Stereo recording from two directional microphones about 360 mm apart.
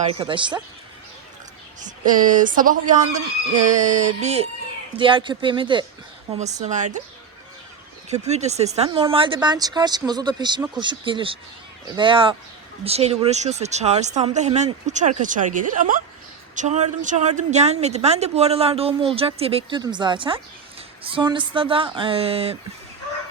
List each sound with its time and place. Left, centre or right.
0.1 s a woman's voice: centre
1.8 s a woman's voice: right
8.1 s a woman's voice: centre